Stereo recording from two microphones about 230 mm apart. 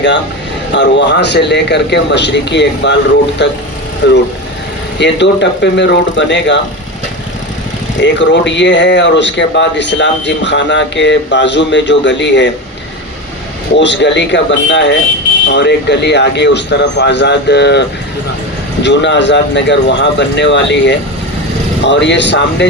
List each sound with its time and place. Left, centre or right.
0.7 s speech: left
8.0 s speech: left
13.7 s speech: left